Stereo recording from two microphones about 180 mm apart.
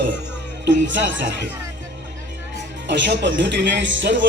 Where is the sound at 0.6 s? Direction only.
80° right.